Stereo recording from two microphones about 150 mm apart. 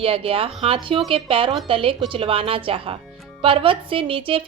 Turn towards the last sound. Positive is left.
turn(degrees=-35)  # may be behind; listen again after turning